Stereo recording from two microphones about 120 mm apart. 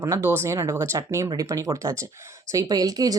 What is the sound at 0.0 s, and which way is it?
A woman's voice, 20° right (ahead or behind).